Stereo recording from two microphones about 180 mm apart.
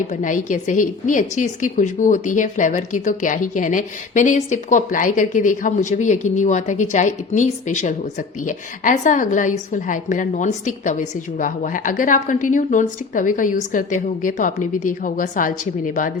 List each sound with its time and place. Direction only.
0.1 s a woman's voice: 45° left (ahead or behind)